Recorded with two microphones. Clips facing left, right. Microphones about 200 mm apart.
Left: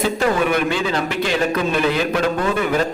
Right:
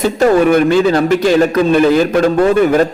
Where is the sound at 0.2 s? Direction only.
45° right (ahead or behind).